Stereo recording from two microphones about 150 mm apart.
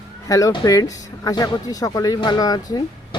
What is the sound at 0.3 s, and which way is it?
Speech, 20° left (ahead or behind).